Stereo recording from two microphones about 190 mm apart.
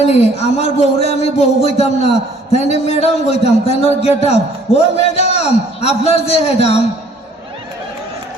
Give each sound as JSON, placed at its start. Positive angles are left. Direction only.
{"t": 0.0, "sound": "a man's voice", "side_deg": 35}